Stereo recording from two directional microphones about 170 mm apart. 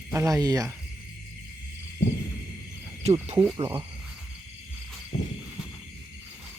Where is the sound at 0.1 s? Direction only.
15° right (ahead or behind).